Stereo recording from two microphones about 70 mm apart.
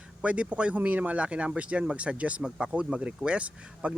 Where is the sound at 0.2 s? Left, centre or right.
Centre.